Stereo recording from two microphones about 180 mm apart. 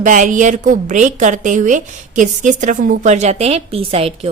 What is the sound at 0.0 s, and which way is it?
A woman's voice, 45° right (ahead or behind).